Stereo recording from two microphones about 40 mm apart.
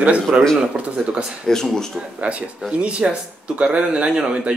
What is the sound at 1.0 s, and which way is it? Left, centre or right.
Speech, right.